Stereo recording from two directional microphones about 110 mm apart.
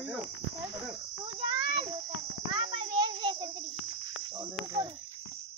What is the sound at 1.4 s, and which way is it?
Speech, 40° right (ahead or behind).